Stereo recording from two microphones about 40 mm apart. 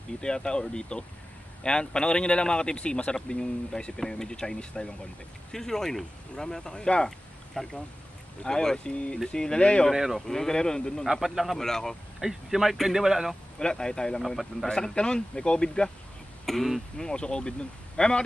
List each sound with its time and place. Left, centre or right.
0.2 s speech: left
8.7 s speech: left
9.9 s speech: centre
10.2 s speech: centre
11.1 s a man's voice: centre
11.5 s speech: centre
12.2 s speech: centre
13.6 s speech: centre
14.2 s a man's voice: centre
14.7 s speech: centre
16.4 s a man's voice: centre
17.0 s speech: left